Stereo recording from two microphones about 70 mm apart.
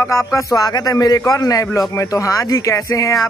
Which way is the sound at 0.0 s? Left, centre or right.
Left.